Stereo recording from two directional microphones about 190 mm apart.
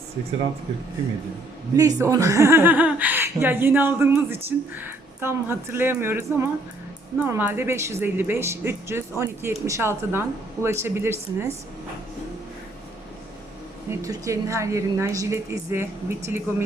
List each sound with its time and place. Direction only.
1.7 s speech: 20° right (ahead or behind)
14.0 s speech: 15° right (ahead or behind)